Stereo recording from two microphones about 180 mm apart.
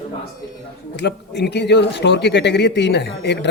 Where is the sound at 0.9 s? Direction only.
70° left (ahead or behind).